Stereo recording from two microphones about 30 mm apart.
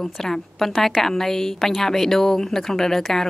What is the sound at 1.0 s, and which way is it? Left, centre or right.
Speech, centre.